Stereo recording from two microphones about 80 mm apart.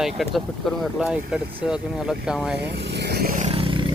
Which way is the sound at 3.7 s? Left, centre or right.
Right.